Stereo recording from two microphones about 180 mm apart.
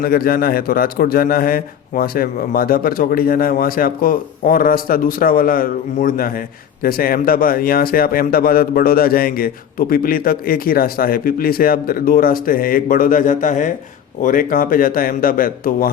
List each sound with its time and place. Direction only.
0.0 s speech: 55° left (ahead or behind)